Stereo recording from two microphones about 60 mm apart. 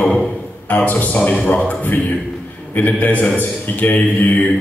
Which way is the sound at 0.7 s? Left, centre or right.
Left.